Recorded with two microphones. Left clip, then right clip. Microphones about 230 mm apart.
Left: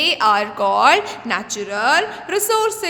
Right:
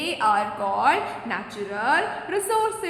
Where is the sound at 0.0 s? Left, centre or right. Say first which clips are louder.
Left 6 dB; left.